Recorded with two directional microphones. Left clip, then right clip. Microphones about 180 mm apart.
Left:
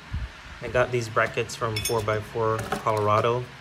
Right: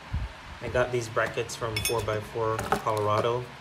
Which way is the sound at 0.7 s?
15° right (ahead or behind).